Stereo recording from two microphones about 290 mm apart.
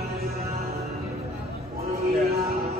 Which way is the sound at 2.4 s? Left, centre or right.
Right.